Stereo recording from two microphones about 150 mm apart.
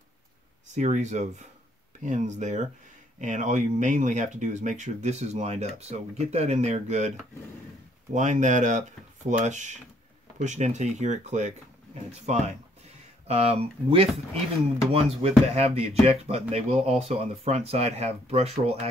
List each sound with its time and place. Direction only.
0.7 s speech: 50° right (ahead or behind)